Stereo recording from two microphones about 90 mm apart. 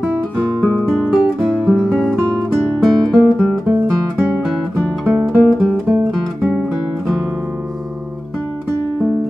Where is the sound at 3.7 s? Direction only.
20° right (ahead or behind).